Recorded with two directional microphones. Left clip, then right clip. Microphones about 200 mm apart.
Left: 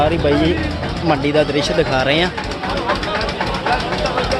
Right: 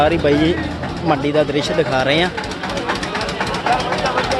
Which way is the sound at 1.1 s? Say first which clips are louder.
Left 1 dB; centre (ahead or behind).